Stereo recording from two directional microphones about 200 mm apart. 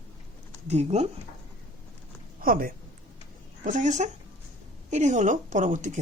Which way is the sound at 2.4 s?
45° right (ahead or behind).